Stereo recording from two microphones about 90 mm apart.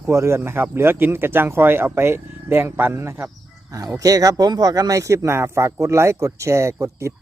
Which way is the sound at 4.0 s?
40° right (ahead or behind).